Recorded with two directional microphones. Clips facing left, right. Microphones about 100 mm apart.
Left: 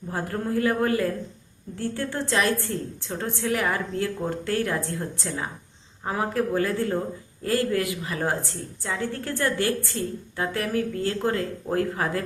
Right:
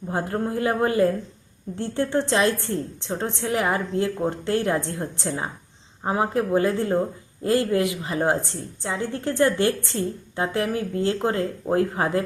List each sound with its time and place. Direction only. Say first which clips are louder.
0.1 s a woman's voice: right 2 dB; 25° right (ahead or behind)